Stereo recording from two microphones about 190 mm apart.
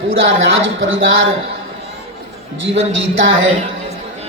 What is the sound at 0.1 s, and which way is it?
Speech, 85° right.